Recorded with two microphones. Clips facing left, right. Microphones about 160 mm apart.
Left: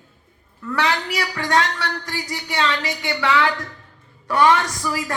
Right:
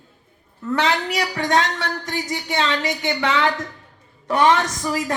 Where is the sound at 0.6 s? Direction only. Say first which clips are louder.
Right 2 dB; 20° right (ahead or behind).